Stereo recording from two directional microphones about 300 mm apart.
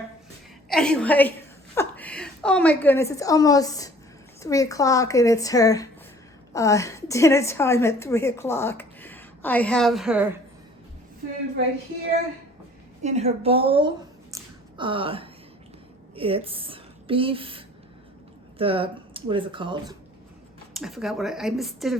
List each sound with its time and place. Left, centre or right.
0.7 s a woman's voice: centre
13.0 s a woman's voice: right
20.7 s a woman's voice: centre